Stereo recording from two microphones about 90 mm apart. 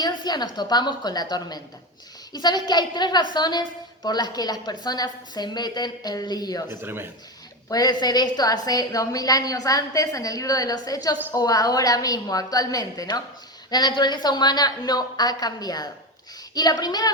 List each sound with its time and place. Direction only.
0.0 s a woman's voice: 50° left (ahead or behind)
6.8 s a man's voice: 25° right (ahead or behind)
7.7 s a woman's voice: 45° left (ahead or behind)